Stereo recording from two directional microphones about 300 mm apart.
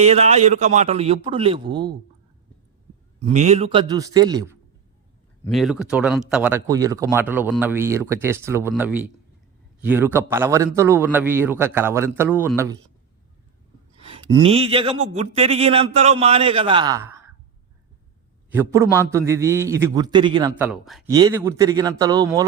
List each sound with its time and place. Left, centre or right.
0.0 s speech: right
3.2 s speech: right
5.5 s speech: centre
14.4 s speech: centre
18.5 s speech: centre
21.1 s speech: centre